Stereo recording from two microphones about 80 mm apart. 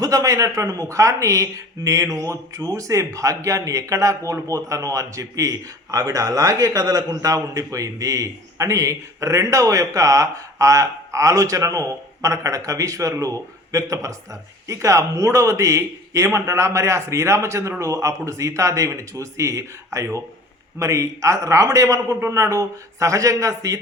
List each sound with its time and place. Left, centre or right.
0.0 s a man's voice: right